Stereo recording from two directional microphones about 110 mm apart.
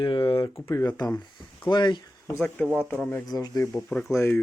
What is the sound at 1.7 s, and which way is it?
Speech, 45° left (ahead or behind).